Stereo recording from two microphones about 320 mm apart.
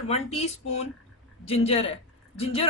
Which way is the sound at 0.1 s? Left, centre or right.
Centre.